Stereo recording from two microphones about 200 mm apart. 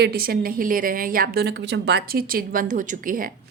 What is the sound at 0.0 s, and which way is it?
A woman's voice, 50° right (ahead or behind).